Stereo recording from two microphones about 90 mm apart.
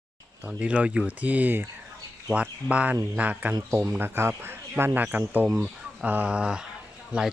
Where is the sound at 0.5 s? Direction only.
10° right (ahead or behind).